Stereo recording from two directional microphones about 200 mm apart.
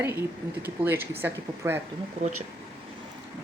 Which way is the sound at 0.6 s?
10° right (ahead or behind).